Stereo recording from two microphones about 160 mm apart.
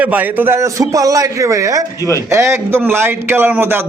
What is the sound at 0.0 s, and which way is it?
A man's voice, 10° right (ahead or behind).